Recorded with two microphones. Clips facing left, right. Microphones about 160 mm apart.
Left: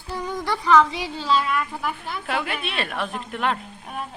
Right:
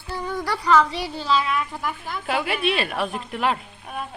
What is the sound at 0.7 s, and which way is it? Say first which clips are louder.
Speech: left 1 dB; 15° left (ahead or behind).